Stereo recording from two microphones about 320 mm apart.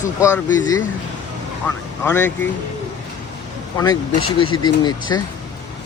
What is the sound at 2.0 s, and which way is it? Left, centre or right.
Speech, centre.